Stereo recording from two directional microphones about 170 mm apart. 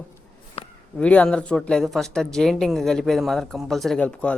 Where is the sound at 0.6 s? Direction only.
35° left (ahead or behind).